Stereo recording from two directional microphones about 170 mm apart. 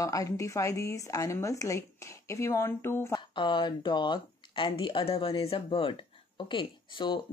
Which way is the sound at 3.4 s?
25° left (ahead or behind).